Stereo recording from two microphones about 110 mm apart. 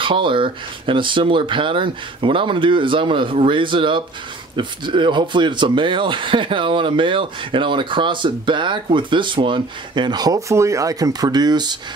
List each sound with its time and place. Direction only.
0.0 s speech: 50° right (ahead or behind)